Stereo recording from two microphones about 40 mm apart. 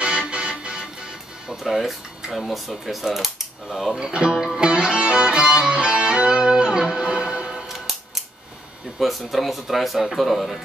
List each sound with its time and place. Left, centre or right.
0.3 s music: right
1.6 s speech: centre
4.0 s speech: right
4.6 s music: right
9.0 s speech: centre